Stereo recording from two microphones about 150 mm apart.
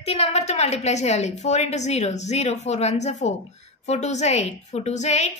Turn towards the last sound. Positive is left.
turn(degrees=50)  # may be behind; listen again after turning